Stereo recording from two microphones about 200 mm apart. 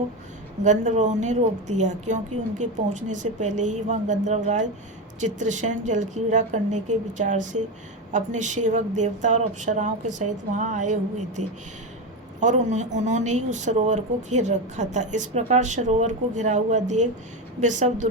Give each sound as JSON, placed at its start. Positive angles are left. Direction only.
{"t": 0.6, "sound": "speech", "side_deg": -35}
{"t": 12.4, "sound": "speech", "side_deg": -35}